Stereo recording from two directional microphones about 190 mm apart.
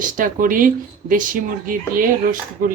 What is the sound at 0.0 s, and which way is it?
Speech, 45° right (ahead or behind).